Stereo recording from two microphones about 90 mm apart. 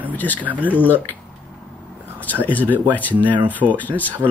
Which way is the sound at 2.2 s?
20° left (ahead or behind).